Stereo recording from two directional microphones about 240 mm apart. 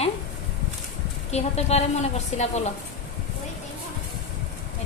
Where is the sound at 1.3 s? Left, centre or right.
Left.